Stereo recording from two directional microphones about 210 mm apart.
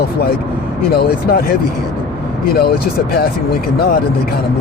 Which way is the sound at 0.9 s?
45° left (ahead or behind).